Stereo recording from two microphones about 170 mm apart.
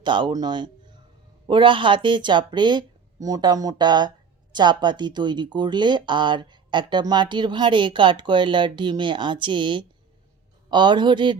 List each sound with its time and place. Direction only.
0.0 s speech: 30° right (ahead or behind)